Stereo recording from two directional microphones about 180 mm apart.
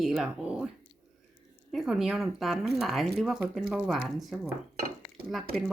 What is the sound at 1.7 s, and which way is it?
Speech, centre (ahead or behind).